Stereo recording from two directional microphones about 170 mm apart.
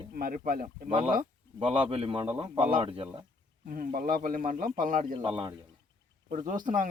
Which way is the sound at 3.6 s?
55° right (ahead or behind).